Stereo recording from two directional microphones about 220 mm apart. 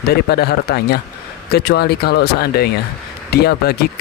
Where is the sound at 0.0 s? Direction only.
45° left (ahead or behind).